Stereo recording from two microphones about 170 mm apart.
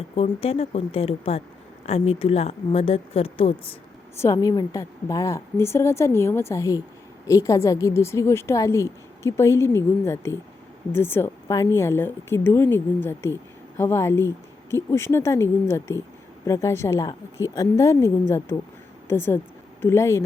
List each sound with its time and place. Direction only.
0.2 s speech: 35° left (ahead or behind)
4.2 s a woman's voice: 20° left (ahead or behind)